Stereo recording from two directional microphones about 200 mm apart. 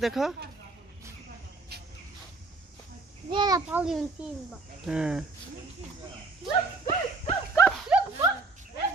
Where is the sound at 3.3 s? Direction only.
20° right (ahead or behind).